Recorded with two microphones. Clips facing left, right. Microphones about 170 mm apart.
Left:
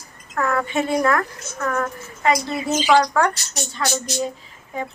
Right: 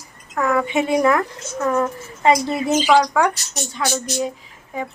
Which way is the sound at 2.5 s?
10° right (ahead or behind).